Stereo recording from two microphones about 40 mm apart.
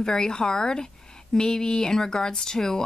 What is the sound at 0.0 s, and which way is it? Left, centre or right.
Speech, centre.